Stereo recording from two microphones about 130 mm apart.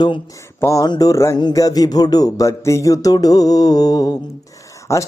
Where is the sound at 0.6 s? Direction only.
25° left (ahead or behind).